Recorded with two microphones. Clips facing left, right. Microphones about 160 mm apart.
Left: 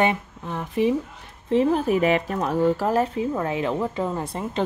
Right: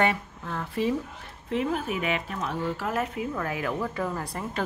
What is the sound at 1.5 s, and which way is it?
Speech, 30° left (ahead or behind).